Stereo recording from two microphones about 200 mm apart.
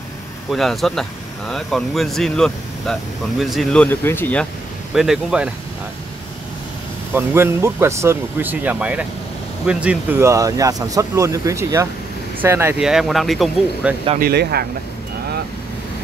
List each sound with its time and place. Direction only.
0.5 s speech: centre (ahead or behind)
4.9 s speech: centre (ahead or behind)
7.2 s speech: 10° right (ahead or behind)
14.2 s speech: 50° right (ahead or behind)